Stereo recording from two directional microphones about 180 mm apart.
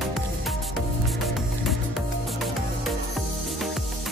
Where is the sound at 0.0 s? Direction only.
Centre (ahead or behind).